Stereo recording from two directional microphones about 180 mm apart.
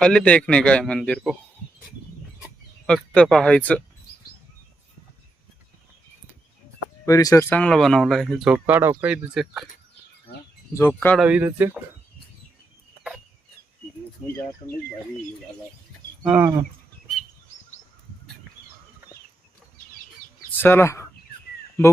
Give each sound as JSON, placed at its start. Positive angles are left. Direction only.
{"t": 0.0, "sound": "speech", "side_deg": 5}
{"t": 2.8, "sound": "speech", "side_deg": 5}
{"t": 7.0, "sound": "speech", "side_deg": 20}
{"t": 8.5, "sound": "speech", "side_deg": -10}
{"t": 10.8, "sound": "speech", "side_deg": 10}
{"t": 11.2, "sound": "speech", "side_deg": -10}
{"t": 16.2, "sound": "speech", "side_deg": -15}
{"t": 20.5, "sound": "speech", "side_deg": 10}